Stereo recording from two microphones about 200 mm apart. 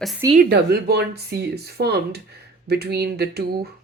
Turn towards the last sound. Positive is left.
turn(degrees=-55)  # may be behind; listen again after turning